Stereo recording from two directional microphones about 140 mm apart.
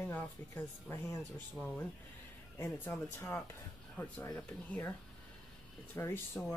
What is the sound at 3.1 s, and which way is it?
Speech, 15° left (ahead or behind).